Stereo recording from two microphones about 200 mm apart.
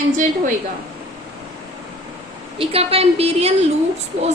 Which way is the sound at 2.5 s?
30° right (ahead or behind).